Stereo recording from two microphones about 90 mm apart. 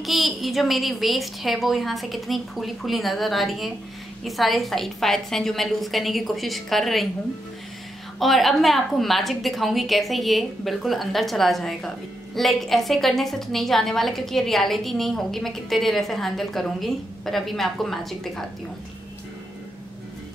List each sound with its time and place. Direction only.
0.0 s a woman's voice: centre (ahead or behind)
8.2 s a woman's voice: centre (ahead or behind)